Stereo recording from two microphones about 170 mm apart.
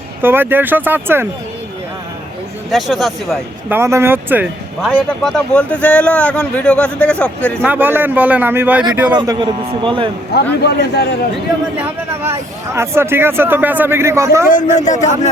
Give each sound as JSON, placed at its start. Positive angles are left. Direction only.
{"t": 0.2, "sound": "speech", "side_deg": -10}
{"t": 2.6, "sound": "speech", "side_deg": 0}
{"t": 3.7, "sound": "speech", "side_deg": -15}
{"t": 4.9, "sound": "speech", "side_deg": 5}
{"t": 7.6, "sound": "speech", "side_deg": -10}
{"t": 9.1, "sound": "speech", "side_deg": -25}
{"t": 10.3, "sound": "a man's voice", "side_deg": 75}
{"t": 11.8, "sound": "speech", "side_deg": -15}
{"t": 14.5, "sound": "a man's voice", "side_deg": 45}